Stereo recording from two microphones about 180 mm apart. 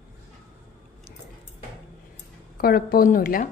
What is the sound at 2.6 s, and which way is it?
Speech, 55° left (ahead or behind).